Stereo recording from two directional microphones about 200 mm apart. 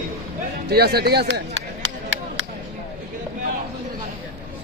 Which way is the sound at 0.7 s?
50° right (ahead or behind).